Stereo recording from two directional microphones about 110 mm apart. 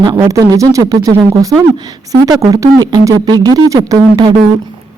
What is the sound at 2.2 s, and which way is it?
Speech, 35° right (ahead or behind).